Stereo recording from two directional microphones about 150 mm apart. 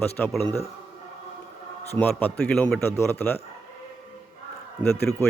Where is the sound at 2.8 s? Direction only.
15° left (ahead or behind).